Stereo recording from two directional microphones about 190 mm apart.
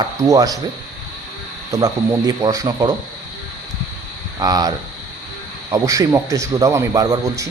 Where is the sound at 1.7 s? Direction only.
20° right (ahead or behind).